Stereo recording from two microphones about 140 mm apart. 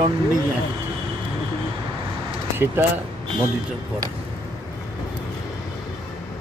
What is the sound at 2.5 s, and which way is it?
Speech, 15° right (ahead or behind).